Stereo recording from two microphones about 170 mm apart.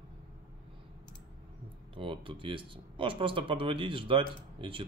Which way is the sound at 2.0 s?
30° right (ahead or behind).